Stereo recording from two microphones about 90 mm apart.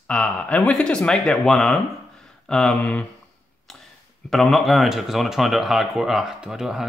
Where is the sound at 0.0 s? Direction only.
10° left (ahead or behind).